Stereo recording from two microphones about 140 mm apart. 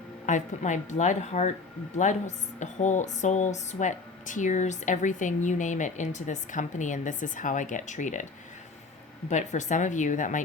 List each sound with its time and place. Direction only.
0.3 s speech: 60° left (ahead or behind)
9.3 s speech: 60° left (ahead or behind)